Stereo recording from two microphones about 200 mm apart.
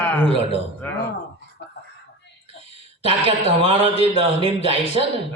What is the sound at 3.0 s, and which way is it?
A man's voice, 30° right (ahead or behind).